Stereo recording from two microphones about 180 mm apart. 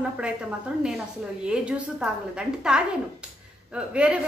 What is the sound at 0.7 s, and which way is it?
A woman's voice, 5° right (ahead or behind).